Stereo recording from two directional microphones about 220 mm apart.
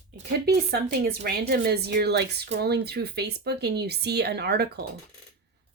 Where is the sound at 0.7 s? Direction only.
45° right (ahead or behind).